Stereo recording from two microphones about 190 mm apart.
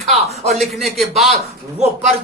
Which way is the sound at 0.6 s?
Centre (ahead or behind).